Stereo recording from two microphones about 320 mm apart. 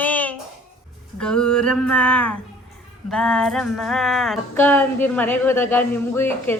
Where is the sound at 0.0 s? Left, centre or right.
Centre.